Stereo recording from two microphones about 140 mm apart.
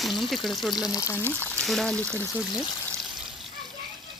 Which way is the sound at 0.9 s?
20° left (ahead or behind).